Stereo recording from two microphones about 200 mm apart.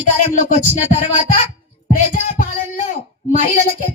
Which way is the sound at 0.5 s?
40° left (ahead or behind).